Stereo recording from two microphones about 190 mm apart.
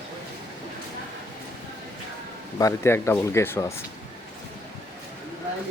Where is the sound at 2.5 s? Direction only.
15° left (ahead or behind).